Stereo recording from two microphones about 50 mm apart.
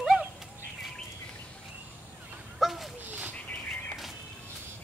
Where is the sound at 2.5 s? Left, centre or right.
Centre.